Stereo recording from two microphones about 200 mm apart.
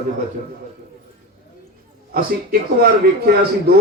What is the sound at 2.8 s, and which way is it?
Speech, 50° right (ahead or behind).